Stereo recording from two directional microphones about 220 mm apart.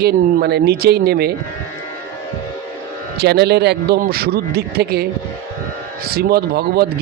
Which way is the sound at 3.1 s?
50° right (ahead or behind).